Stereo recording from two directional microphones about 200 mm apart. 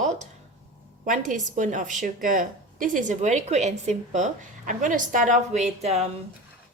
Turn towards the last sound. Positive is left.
turn(degrees=-30)  # may be behind; listen again after turning